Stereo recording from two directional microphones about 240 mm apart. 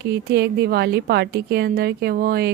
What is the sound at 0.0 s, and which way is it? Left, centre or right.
A woman's voice, right.